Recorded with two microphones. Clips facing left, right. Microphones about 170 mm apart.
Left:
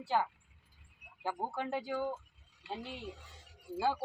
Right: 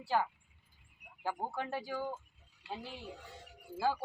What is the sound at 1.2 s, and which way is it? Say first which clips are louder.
Speech: left 1 dB; 15° left (ahead or behind).